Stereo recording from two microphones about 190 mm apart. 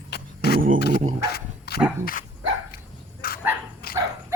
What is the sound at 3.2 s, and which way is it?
Bow-wow, 50° left (ahead or behind).